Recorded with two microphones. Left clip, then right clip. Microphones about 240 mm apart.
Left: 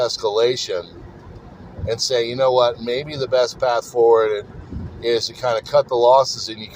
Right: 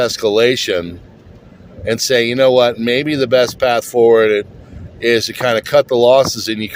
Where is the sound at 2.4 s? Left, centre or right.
Right.